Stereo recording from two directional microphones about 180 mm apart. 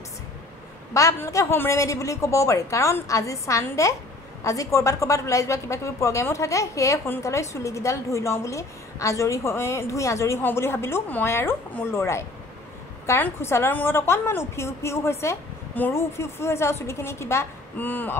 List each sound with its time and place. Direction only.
0.9 s a woman's voice: 15° left (ahead or behind)